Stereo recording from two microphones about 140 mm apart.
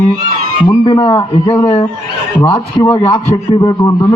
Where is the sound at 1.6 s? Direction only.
50° left (ahead or behind).